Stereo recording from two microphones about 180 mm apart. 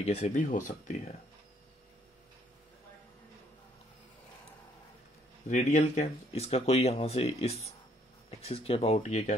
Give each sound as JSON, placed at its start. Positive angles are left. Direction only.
{"t": 0.0, "sound": "speech", "side_deg": 40}
{"t": 5.5, "sound": "speech", "side_deg": 40}